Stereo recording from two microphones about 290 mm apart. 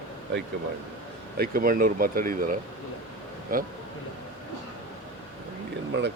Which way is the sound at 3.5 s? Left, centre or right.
Right.